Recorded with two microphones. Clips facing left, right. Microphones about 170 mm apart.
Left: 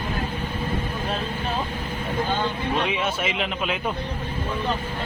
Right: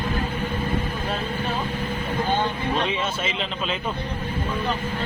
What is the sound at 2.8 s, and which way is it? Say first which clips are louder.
Speech: left 1 dB; 15° left (ahead or behind).